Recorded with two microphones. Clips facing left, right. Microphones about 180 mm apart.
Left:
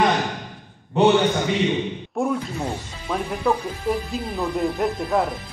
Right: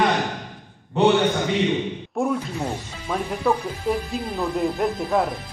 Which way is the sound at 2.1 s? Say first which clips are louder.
Even; centre (ahead or behind).